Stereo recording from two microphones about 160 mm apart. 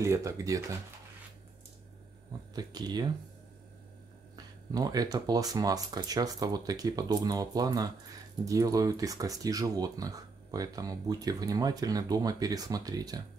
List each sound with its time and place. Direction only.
0.0 s speech: 20° right (ahead or behind)
2.5 s speech: 25° right (ahead or behind)
4.7 s speech: 25° right (ahead or behind)